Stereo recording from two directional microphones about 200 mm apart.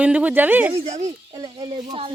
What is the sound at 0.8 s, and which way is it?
Speech, 30° right (ahead or behind).